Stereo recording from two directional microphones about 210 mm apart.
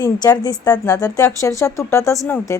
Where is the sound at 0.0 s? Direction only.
15° left (ahead or behind).